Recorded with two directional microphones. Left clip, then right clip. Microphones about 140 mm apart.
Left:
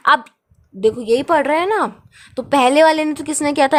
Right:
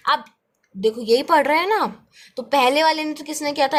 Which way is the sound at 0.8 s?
25° left (ahead or behind).